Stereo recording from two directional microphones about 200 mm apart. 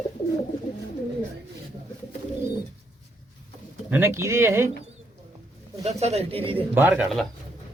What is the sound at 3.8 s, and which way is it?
Speech, 10° right (ahead or behind).